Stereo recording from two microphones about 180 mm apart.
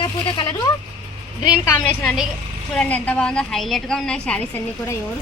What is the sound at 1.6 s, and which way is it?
A woman's voice, 5° left (ahead or behind).